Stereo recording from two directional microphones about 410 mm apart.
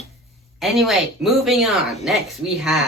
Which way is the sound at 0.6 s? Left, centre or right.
Centre.